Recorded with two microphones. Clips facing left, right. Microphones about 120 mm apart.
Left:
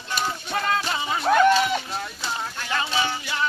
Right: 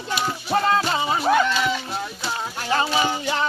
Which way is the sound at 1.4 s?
50° left (ahead or behind).